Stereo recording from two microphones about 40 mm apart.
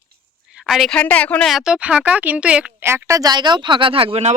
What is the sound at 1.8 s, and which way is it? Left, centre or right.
Speech, right.